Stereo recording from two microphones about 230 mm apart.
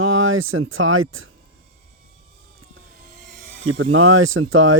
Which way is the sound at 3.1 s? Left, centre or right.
Right.